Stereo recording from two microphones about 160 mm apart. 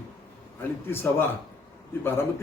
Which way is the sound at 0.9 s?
15° left (ahead or behind).